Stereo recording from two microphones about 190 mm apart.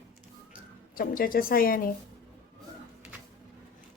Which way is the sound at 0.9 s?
50° left (ahead or behind).